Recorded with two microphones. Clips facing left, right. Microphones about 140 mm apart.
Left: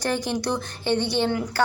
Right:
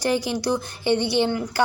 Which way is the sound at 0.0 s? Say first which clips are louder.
Right 2 dB; 10° right (ahead or behind).